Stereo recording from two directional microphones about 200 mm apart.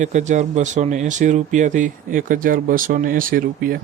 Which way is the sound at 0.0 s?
35° right (ahead or behind).